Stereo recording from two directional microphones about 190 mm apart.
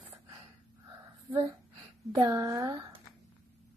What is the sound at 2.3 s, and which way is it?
Speech, 15° right (ahead or behind).